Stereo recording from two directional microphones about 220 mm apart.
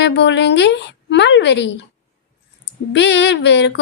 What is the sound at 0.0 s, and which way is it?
A woman's voice, 55° left (ahead or behind).